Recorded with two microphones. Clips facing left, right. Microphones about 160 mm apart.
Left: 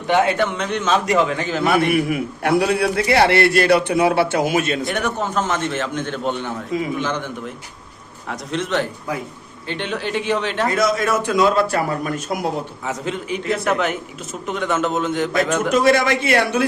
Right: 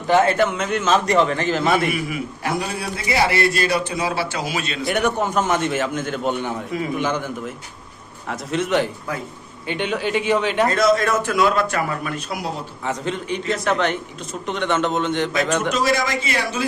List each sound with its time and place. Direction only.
0.1 s a man's voice: centre (ahead or behind)
1.9 s a man's voice: 60° left (ahead or behind)
4.9 s a man's voice: 10° right (ahead or behind)
10.8 s a man's voice: centre (ahead or behind); by 12.5 s 45° left (ahead or behind)
12.8 s a man's voice: 5° left (ahead or behind)
15.7 s a man's voice: 55° left (ahead or behind)